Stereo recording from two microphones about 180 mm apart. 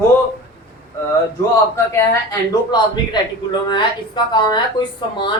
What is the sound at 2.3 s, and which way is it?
Speech, 25° left (ahead or behind).